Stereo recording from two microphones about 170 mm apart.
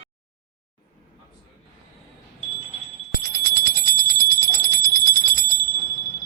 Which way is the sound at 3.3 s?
60° right (ahead or behind).